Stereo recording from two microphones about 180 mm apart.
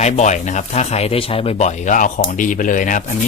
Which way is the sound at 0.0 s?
40° left (ahead or behind).